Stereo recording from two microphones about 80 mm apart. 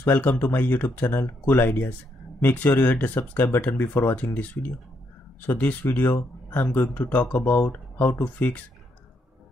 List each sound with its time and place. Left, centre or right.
0.0 s speech: left
5.5 s speech: centre